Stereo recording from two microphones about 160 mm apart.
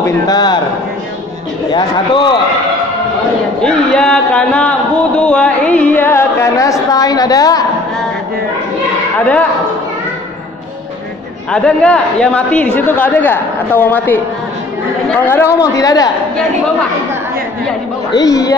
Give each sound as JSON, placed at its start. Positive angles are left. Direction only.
{"t": 0.0, "sound": "speech", "side_deg": 25}
{"t": 1.7, "sound": "speech", "side_deg": 30}
{"t": 3.6, "sound": "a man's voice", "side_deg": 5}
{"t": 11.5, "sound": "a man's voice", "side_deg": 5}
{"t": 18.1, "sound": "speech", "side_deg": 20}